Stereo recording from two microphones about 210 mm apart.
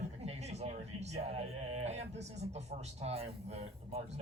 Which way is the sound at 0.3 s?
30° right (ahead or behind).